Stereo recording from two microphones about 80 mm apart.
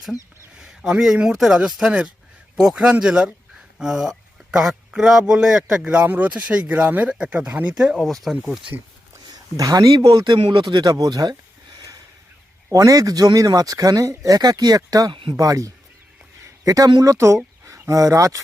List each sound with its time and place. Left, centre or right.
0.6 s speech: centre
7.9 s speech: centre
8.4 s speech: centre
9.3 s speech: right
10.1 s speech: right
12.7 s speech: right